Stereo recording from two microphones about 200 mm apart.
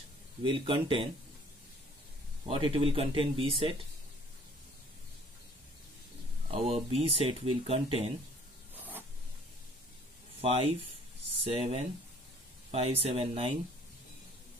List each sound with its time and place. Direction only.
0.4 s speech: 25° right (ahead or behind)
2.4 s speech: 25° right (ahead or behind)
6.5 s speech: 30° right (ahead or behind)
8.7 s spray: 10° right (ahead or behind)
10.4 s speech: 30° right (ahead or behind)